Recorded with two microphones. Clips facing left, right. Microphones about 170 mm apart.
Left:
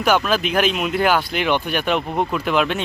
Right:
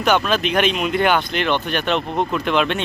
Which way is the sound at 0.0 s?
5° left (ahead or behind).